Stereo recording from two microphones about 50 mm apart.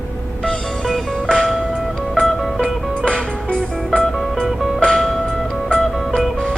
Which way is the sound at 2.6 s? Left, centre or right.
Centre.